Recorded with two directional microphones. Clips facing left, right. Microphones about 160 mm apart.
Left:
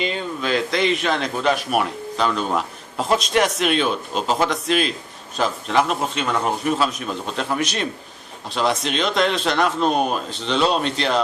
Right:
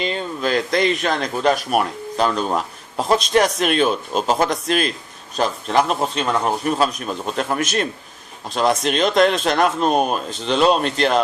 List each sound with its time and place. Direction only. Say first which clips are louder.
0.0 s a man's voice: right 2 dB; 40° right (ahead or behind)